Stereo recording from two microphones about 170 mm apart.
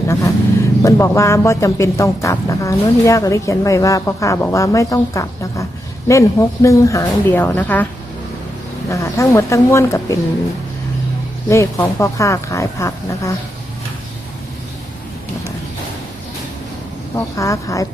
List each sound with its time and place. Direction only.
0.1 s speech: 20° left (ahead or behind)
8.9 s speech: 20° left (ahead or behind)
11.4 s speech: 15° left (ahead or behind)
17.3 s speech: 20° left (ahead or behind)